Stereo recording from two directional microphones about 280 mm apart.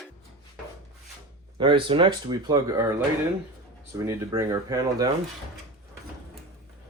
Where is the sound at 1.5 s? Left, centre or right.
Centre.